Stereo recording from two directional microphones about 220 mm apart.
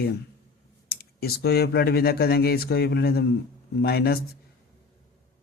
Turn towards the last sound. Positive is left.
turn(degrees=45)  # may be behind; listen again after turning